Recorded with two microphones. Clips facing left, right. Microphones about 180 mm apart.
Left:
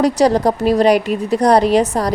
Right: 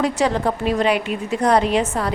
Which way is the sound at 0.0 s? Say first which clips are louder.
Left 6 dB; 40° left (ahead or behind).